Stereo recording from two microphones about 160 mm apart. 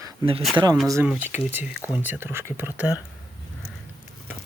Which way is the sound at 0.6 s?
15° right (ahead or behind).